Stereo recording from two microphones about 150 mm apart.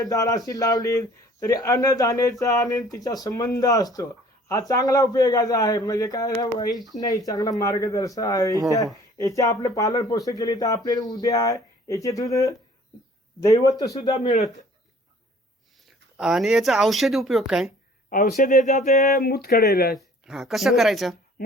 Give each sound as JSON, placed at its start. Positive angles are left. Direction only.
{"t": 0.0, "sound": "a man's voice", "side_deg": 25}
{"t": 16.1, "sound": "speech", "side_deg": 0}
{"t": 18.1, "sound": "speech", "side_deg": 65}
{"t": 19.0, "sound": "speech", "side_deg": 85}
{"t": 20.0, "sound": "speech", "side_deg": 0}